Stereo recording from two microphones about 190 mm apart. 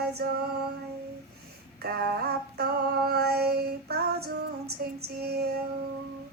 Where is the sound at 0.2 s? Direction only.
55° right (ahead or behind).